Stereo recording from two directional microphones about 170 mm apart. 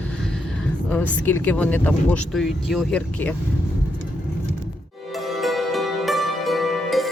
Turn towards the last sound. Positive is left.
turn(degrees=0)  # may be behind; listen again after turning